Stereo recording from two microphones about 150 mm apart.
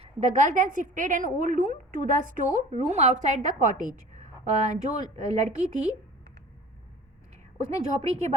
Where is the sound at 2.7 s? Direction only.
50° right (ahead or behind).